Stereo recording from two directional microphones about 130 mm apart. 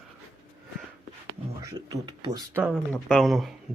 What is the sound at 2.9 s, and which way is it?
Speech, 5° left (ahead or behind).